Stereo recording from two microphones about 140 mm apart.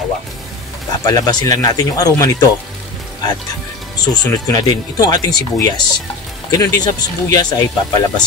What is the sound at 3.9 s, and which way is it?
A man's voice, 30° left (ahead or behind).